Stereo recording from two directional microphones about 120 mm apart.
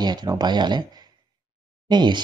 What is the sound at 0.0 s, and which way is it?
Speech, 35° right (ahead or behind).